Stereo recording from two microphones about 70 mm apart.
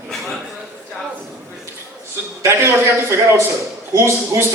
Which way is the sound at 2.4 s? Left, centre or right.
Right.